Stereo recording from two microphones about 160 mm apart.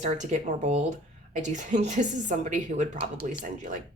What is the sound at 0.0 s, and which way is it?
A woman's voice, 45° right (ahead or behind).